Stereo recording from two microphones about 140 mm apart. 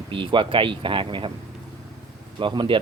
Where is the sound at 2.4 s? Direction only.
35° right (ahead or behind).